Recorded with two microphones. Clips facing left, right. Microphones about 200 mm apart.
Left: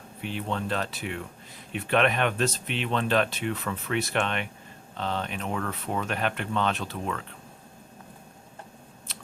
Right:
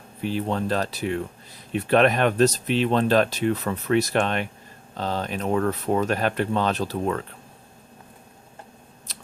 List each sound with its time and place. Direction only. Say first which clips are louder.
0.2 s speech: right 6 dB; 35° right (ahead or behind)
9.1 s scissors: even; 40° right (ahead or behind)